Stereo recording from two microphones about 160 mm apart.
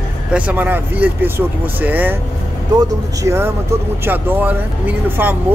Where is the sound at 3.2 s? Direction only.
15° right (ahead or behind).